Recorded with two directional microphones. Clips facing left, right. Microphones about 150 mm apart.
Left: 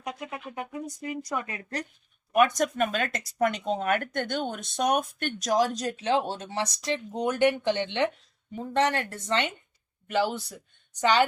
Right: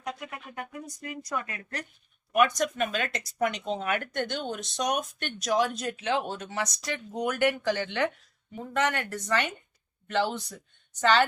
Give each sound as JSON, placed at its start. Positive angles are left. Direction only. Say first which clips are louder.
{"t": 0.0, "sound": "speech", "louder": "left 2 dB", "side_deg": 20}
{"t": 2.3, "sound": "speech", "louder": "left 2 dB", "side_deg": 45}
{"t": 10.1, "sound": "speech", "louder": "left 1 dB", "side_deg": 5}